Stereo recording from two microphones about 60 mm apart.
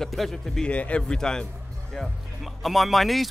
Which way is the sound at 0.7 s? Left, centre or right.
Left.